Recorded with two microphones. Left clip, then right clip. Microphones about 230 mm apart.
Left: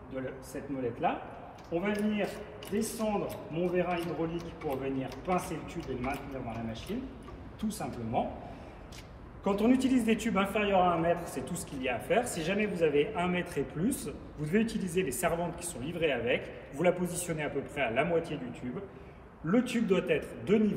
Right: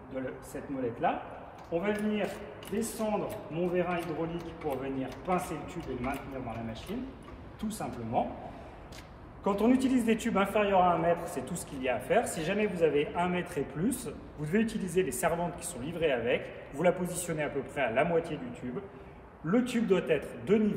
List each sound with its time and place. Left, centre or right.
1.0 s a man's voice: centre
9.4 s a man's voice: centre
19.4 s a man's voice: centre